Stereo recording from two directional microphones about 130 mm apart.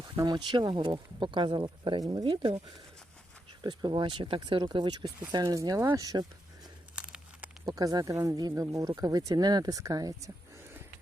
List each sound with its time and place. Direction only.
0.2 s speech: 35° right (ahead or behind)
2.2 s speech: 40° right (ahead or behind)
3.6 s speech: 35° right (ahead or behind)
6.9 s crumpling: 10° right (ahead or behind)
7.7 s speech: 30° right (ahead or behind)